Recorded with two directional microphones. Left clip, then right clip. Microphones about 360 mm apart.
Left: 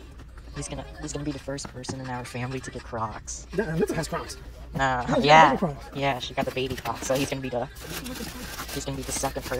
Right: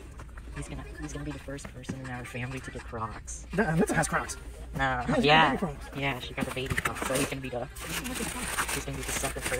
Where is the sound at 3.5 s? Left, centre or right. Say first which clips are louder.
Even; right.